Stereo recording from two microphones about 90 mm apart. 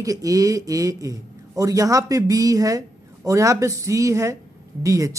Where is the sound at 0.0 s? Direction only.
40° right (ahead or behind).